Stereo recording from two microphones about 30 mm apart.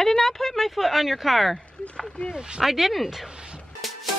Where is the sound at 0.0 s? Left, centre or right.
Centre.